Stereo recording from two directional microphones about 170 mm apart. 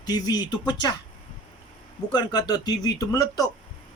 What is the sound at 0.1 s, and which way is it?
Speech, 25° left (ahead or behind).